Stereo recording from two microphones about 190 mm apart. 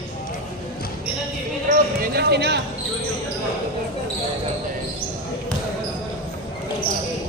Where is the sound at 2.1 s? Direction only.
60° right (ahead or behind).